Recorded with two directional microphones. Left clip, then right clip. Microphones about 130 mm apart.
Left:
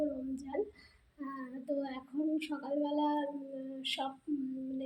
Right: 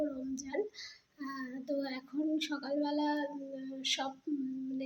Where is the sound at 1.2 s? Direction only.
10° right (ahead or behind).